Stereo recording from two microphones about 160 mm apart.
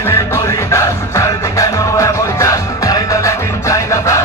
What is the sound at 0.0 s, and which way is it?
Music, 15° left (ahead or behind).